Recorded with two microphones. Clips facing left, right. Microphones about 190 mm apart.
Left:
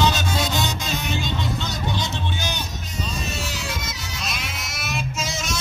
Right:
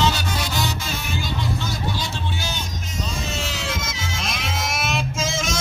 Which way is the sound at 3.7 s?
50° right (ahead or behind).